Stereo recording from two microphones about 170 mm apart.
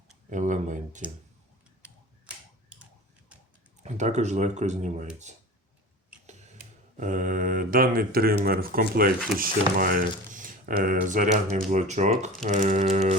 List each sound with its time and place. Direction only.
0.3 s speech: 45° right (ahead or behind)
1.8 s a sound: 5° right (ahead or behind)
3.8 s speech: 45° right (ahead or behind)
6.9 s speech: 50° right (ahead or behind)